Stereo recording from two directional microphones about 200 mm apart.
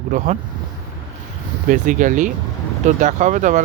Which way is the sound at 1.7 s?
40° right (ahead or behind).